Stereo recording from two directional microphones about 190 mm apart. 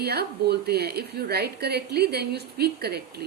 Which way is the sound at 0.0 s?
55° right (ahead or behind).